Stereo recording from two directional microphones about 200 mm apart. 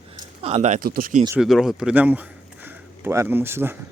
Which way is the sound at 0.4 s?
35° right (ahead or behind).